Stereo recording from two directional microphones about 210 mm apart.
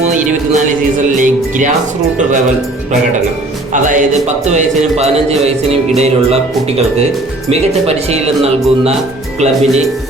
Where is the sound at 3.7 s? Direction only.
35° right (ahead or behind).